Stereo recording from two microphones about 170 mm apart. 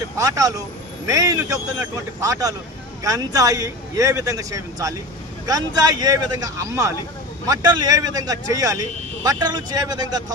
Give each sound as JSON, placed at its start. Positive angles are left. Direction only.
{"t": 0.2, "sound": "speech", "side_deg": -20}